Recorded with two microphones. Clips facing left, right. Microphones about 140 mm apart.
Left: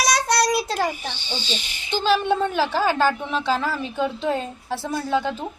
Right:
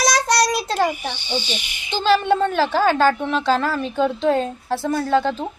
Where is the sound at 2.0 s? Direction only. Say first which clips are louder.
Right 3 dB; 10° left (ahead or behind).